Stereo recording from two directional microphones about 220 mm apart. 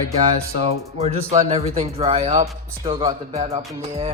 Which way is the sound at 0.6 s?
25° right (ahead or behind).